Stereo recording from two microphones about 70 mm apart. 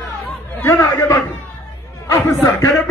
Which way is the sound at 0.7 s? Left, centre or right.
Left.